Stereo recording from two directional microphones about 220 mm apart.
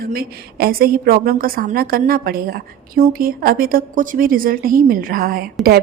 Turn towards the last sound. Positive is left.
turn(degrees=-40)  # may be behind; listen again after turning